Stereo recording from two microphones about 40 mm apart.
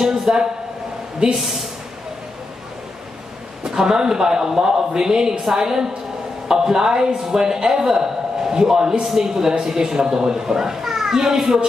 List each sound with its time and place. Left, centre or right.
0.0 s a woman's voice: centre
3.6 s speech: centre